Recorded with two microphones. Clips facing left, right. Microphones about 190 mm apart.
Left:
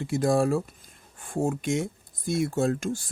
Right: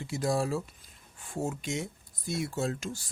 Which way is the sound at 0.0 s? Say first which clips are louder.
Left 7 dB; 50° left (ahead or behind).